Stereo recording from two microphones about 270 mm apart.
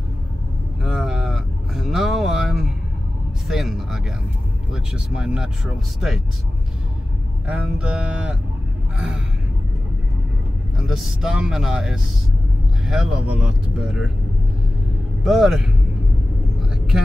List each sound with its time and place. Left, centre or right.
0.8 s vehicle: centre
3.4 s speech: centre
7.4 s speech: centre
10.8 s speech: centre
15.2 s speech: centre
16.7 s vehicle: centre